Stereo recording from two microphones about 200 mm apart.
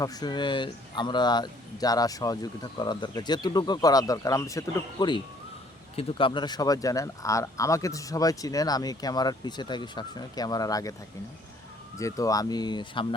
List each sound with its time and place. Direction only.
0.0 s speech: 20° left (ahead or behind)
11.9 s speech: 15° left (ahead or behind)